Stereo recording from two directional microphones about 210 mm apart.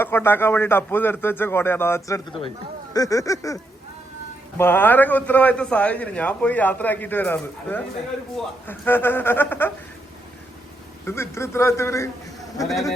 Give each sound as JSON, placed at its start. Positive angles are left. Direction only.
{"t": 0.0, "sound": "a man's voice", "side_deg": 10}
{"t": 11.0, "sound": "a man's voice", "side_deg": 10}
{"t": 12.6, "sound": "speech", "side_deg": 0}